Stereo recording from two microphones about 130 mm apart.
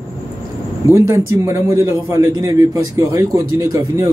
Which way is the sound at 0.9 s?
25° right (ahead or behind).